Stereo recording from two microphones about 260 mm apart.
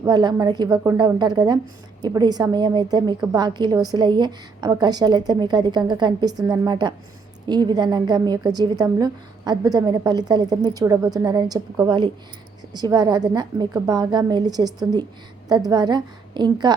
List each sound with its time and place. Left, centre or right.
0.0 s a woman's voice: centre